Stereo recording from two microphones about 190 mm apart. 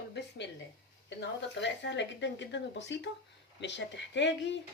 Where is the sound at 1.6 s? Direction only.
70° left (ahead or behind).